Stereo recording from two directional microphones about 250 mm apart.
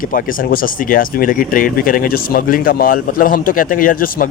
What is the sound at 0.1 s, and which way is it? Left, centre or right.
Speech, left.